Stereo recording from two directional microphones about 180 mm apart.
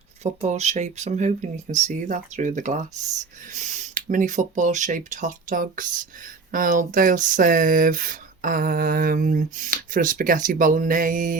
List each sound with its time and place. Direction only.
0.2 s speech: 40° right (ahead or behind)